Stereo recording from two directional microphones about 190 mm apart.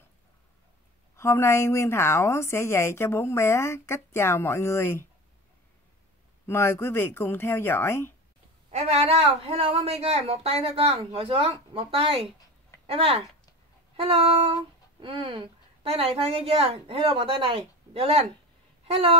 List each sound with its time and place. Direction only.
1.1 s a woman's voice: 15° left (ahead or behind)
6.4 s a woman's voice: 15° left (ahead or behind)
8.6 s speech: 35° right (ahead or behind)